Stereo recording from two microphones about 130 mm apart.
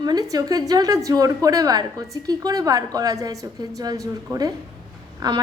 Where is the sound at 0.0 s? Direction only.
30° right (ahead or behind).